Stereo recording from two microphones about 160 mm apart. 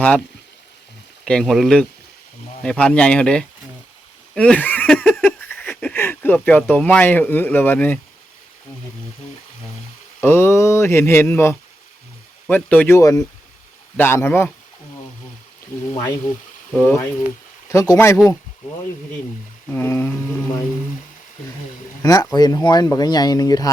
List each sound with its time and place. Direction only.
1.2 s speech: 5° left (ahead or behind)
4.4 s a sound: 10° left (ahead or behind)
5.7 s speech: 10° left (ahead or behind)
10.2 s speech: 15° left (ahead or behind)
16.7 s speech: 15° left (ahead or behind)
19.6 s speech: 15° left (ahead or behind)
22.0 s speech: 25° left (ahead or behind)